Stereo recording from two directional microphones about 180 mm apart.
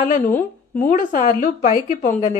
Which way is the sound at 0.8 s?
45° left (ahead or behind).